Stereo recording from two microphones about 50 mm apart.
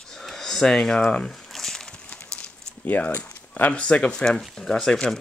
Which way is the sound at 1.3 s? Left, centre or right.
Centre.